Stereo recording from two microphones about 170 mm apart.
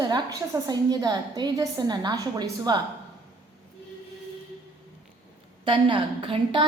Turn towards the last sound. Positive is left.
turn(degrees=-30)  # may be behind; listen again after turning